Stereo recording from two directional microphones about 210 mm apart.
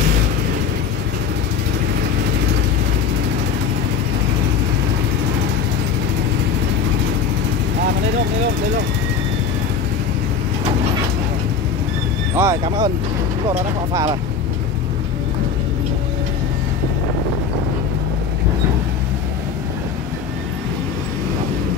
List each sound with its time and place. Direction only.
12.4 s speech: 15° right (ahead or behind)